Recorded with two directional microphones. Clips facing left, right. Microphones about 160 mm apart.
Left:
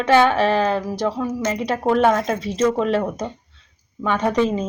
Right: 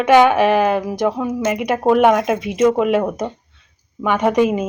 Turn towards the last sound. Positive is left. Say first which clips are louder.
# right 4 dB
turn(degrees=-15)  # may be behind; listen again after turning